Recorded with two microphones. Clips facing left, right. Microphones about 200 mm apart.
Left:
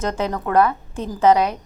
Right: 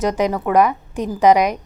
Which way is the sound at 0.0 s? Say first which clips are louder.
Right 5 dB; 15° right (ahead or behind).